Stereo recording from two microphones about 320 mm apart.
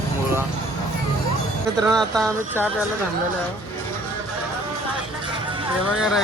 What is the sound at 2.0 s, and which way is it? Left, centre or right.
Speech, centre.